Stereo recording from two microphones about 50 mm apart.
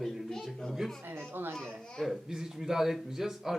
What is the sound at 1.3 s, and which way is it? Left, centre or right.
Speech, right.